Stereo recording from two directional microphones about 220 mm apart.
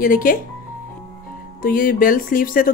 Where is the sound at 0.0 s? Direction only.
40° left (ahead or behind).